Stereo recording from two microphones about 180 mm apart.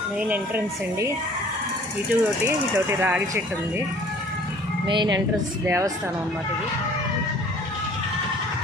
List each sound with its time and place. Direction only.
0.2 s speech: 10° right (ahead or behind)
4.9 s a woman's voice: 25° right (ahead or behind)